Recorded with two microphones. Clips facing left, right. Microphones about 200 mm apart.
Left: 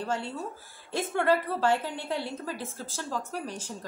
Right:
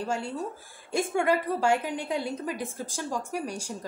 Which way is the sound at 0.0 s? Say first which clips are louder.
Right 2 dB; 10° right (ahead or behind).